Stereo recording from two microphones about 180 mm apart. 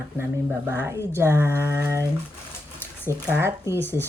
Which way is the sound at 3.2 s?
15° right (ahead or behind).